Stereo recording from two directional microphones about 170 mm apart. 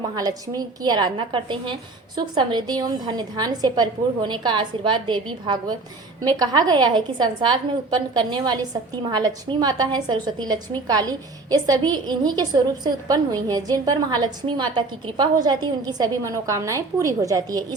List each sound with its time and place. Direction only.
0.2 s a woman's voice: 20° right (ahead or behind)